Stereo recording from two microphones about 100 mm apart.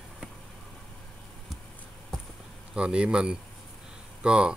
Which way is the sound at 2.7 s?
10° right (ahead or behind).